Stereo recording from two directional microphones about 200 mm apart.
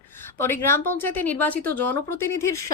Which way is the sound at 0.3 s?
10° left (ahead or behind).